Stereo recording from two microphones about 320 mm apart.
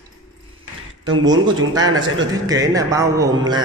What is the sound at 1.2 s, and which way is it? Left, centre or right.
A man's voice, centre.